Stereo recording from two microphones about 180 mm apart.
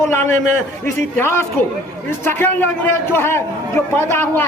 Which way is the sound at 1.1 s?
15° left (ahead or behind).